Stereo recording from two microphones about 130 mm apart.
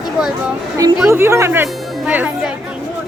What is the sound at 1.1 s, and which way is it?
Speech, 20° right (ahead or behind).